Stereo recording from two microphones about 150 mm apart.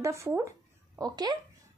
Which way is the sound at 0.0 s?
20° right (ahead or behind).